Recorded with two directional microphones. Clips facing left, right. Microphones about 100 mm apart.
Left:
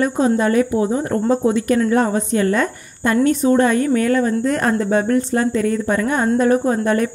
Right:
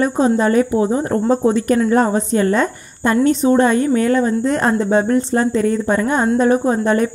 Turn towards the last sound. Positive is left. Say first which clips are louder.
# right 2 dB
turn(degrees=-25)  # may be behind; listen again after turning